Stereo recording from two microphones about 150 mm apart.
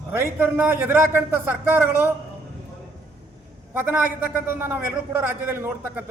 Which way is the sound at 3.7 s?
10° right (ahead or behind).